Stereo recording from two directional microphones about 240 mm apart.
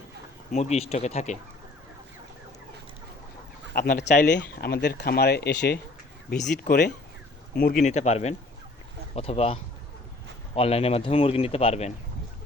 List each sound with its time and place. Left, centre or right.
0.5 s a man's voice: left
3.8 s a man's voice: left